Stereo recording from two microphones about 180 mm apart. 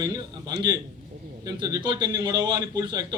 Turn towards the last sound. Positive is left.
turn(degrees=-25)  # may be behind; listen again after turning